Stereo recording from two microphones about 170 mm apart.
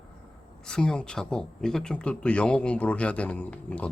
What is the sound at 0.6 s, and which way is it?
Speech, 5° left (ahead or behind).